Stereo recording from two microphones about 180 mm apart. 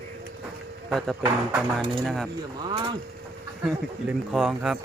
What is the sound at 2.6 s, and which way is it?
Speech, 30° right (ahead or behind).